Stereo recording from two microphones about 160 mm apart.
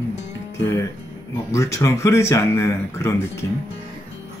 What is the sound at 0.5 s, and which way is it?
Speech, 15° left (ahead or behind).